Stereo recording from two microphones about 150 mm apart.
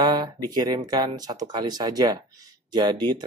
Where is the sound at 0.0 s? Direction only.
30° right (ahead or behind).